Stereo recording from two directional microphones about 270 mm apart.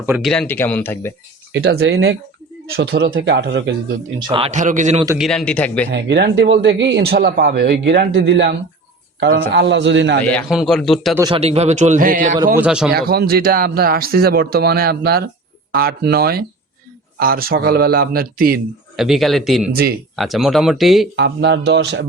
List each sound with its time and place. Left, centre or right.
0.0 s speech: centre
1.5 s speech: right
4.2 s a man's voice: centre
5.0 s speech: centre
5.9 s speech: right
10.3 s speech: centre
11.2 s a man's voice: centre
12.5 s speech: centre
12.9 s speech: right
18.9 s speech: centre
21.2 s speech: right